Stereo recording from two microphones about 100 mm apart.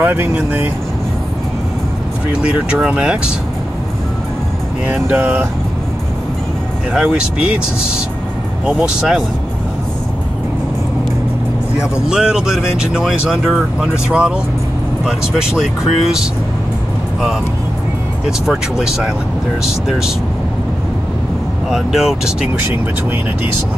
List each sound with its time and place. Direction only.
0.0 s speech: 20° right (ahead or behind)
2.3 s speech: 10° right (ahead or behind)
4.8 s speech: 20° right (ahead or behind)
6.9 s speech: 10° right (ahead or behind)
11.8 s speech: 5° right (ahead or behind)
19.6 s speech: 5° right (ahead or behind)
21.6 s speech: 5° right (ahead or behind)